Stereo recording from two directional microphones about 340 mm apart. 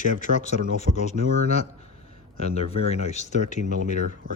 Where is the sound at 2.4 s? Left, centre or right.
Centre.